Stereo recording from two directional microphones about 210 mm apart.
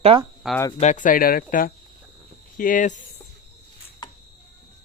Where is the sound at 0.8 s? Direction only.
35° left (ahead or behind).